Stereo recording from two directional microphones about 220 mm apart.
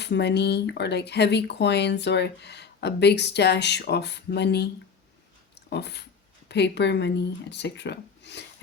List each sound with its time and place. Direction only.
0.0 s speech: 50° left (ahead or behind)
5.7 s speech: 50° left (ahead or behind)